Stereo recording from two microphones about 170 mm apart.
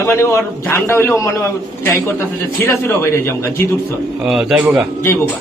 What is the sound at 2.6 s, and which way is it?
Speech, 15° left (ahead or behind).